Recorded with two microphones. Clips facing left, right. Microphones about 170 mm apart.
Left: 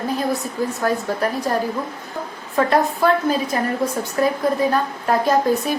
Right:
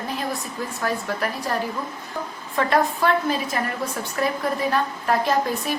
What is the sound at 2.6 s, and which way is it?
A woman's voice, 40° left (ahead or behind).